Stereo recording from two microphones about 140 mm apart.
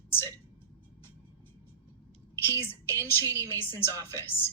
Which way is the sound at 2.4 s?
15° left (ahead or behind).